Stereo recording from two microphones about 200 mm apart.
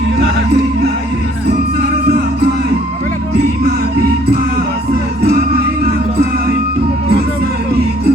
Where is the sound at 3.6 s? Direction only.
50° right (ahead or behind).